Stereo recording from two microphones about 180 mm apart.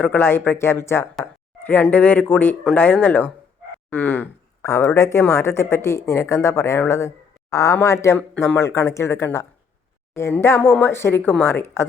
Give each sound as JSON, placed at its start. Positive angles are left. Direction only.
{"t": 0.0, "sound": "speech", "side_deg": 10}